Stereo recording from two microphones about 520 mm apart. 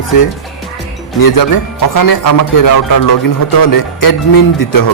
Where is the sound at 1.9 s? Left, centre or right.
Left.